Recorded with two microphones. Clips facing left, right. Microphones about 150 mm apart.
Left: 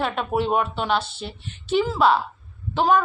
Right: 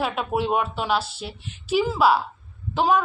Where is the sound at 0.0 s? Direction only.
Centre (ahead or behind).